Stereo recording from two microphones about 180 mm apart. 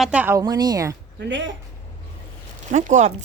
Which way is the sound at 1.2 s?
90° right.